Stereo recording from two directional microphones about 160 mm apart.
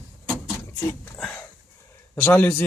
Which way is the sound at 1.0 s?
5° left (ahead or behind).